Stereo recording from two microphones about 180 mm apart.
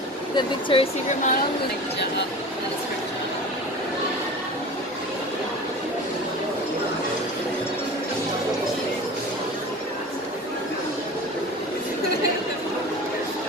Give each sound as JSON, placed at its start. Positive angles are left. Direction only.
{"t": 0.4, "sound": "speech", "side_deg": 30}